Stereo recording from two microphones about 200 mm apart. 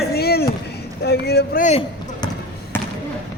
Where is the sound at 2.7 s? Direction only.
10° left (ahead or behind).